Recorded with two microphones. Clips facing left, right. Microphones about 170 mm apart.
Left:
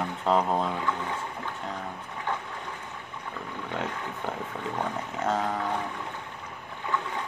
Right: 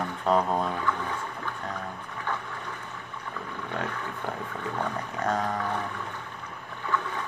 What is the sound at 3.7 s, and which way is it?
Roaring cats, 20° left (ahead or behind).